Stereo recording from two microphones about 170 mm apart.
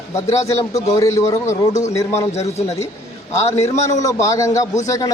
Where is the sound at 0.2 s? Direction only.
20° left (ahead or behind).